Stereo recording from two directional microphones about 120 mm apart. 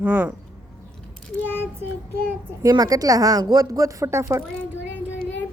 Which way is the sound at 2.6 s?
30° right (ahead or behind).